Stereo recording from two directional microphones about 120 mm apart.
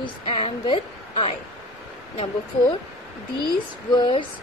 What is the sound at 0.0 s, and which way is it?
A woman's voice, 45° left (ahead or behind).